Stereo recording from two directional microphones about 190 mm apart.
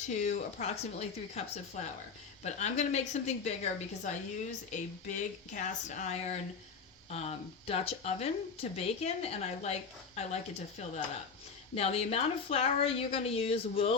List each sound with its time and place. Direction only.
0.0 s a woman's voice: 40° left (ahead or behind)